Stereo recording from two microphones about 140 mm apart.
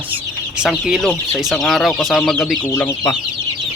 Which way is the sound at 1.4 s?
Centre (ahead or behind).